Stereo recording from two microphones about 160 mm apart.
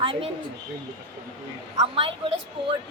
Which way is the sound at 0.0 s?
35° right (ahead or behind).